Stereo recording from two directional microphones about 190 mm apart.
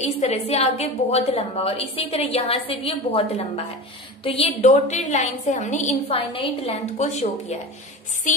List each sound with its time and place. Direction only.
0.0 s a woman's voice: 35° left (ahead or behind)